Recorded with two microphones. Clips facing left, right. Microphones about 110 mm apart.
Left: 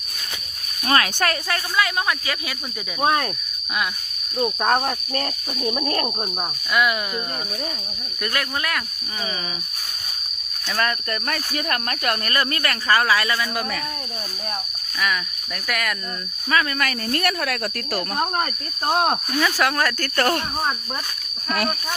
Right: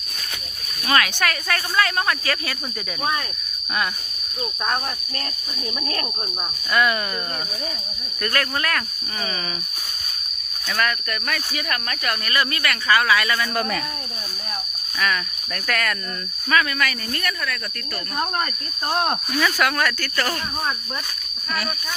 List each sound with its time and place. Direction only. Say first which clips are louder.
0.9 s speech: left 1 dB; 30° left (ahead or behind)
1.7 s speech: right 1 dB; 10° left (ahead or behind)
4.6 s speech: left 4 dB; 50° left (ahead or behind)
5.1 s speech: left 6 dB; 35° left (ahead or behind)
6.7 s speech: right 1 dB; 10° left (ahead or behind)
8.2 s speech: right 2 dB; 15° left (ahead or behind)
10.8 s speech: even; 30° left (ahead or behind)
11.5 s speech: left 2 dB; 45° left (ahead or behind); by 13.4 s 30° left (ahead or behind)
13.4 s speech: right 2 dB; 5° left (ahead or behind)
14.9 s speech: right 1 dB; 10° left (ahead or behind)
16.5 s speech: right 1 dB; 30° left (ahead or behind); by 18.0 s 70° left (ahead or behind)
19.5 s speech: even; 30° left (ahead or behind)
20.0 s speech: left 4 dB; 50° left (ahead or behind)